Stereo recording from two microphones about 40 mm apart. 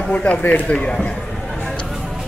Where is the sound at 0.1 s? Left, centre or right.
Left.